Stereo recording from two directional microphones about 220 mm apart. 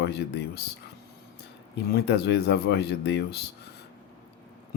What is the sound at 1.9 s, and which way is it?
Speech, 50° left (ahead or behind).